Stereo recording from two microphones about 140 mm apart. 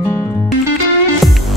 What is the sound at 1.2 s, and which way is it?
Music, centre (ahead or behind).